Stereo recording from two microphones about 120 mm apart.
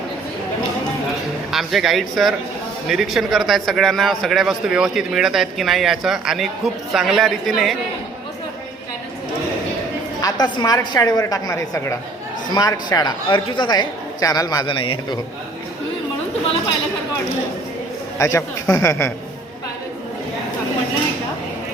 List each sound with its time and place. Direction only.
1.5 s a man's voice: centre (ahead or behind)
10.2 s speech: 30° left (ahead or behind)
14.7 s a man's voice: 45° left (ahead or behind)
18.2 s a man's voice: 25° left (ahead or behind)